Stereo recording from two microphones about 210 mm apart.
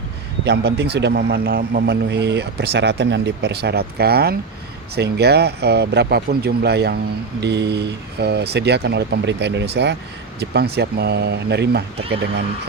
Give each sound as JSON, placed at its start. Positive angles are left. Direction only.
{"t": 0.4, "sound": "a man's voice", "side_deg": -55}